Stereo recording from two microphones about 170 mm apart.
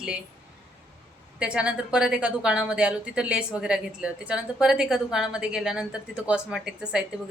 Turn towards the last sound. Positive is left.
turn(degrees=-5)  # may be behind; listen again after turning